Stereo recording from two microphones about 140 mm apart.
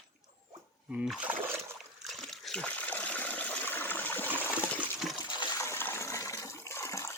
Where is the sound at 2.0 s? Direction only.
Centre (ahead or behind).